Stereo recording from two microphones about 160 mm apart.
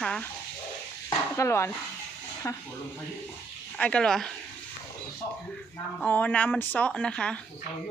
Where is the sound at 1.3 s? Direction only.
15° left (ahead or behind).